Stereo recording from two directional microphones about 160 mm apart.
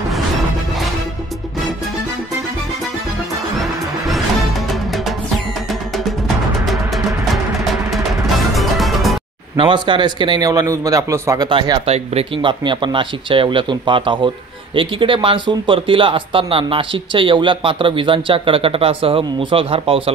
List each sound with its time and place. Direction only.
6.2 s music: centre (ahead or behind)
7.9 s music: centre (ahead or behind)
9.6 s a man's voice: 30° right (ahead or behind)